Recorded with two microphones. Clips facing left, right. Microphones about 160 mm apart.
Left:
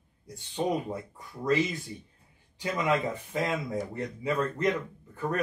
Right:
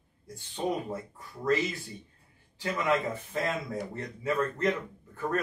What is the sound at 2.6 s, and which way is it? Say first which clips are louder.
Speech: left 1 dB; 15° left (ahead or behind).